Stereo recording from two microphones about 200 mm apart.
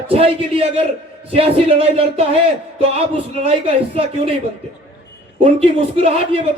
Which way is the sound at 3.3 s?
30° right (ahead or behind).